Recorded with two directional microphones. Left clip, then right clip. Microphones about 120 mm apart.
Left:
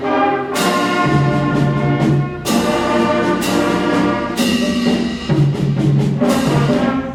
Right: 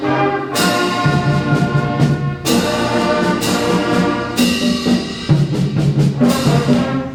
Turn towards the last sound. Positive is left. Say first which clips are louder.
# even
turn(degrees=-45)  # may be behind; listen again after turning